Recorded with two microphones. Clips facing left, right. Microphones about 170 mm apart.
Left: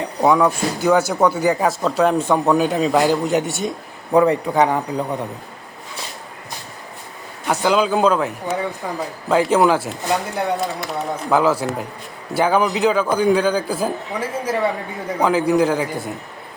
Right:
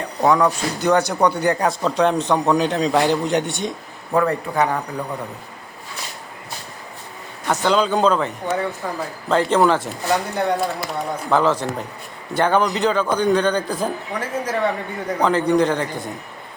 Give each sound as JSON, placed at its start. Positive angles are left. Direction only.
{"t": 0.0, "sound": "speech", "side_deg": 5}
{"t": 4.1, "sound": "a man's voice", "side_deg": 15}
{"t": 7.4, "sound": "a man's voice", "side_deg": 10}